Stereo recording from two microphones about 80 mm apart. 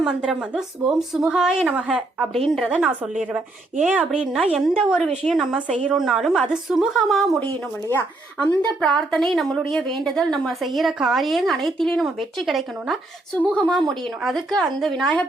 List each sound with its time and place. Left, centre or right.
0.0 s a woman's voice: centre
2.3 s a woman's voice: centre
3.2 s a woman's voice: centre
7.3 s speech: centre
8.8 s a woman's voice: centre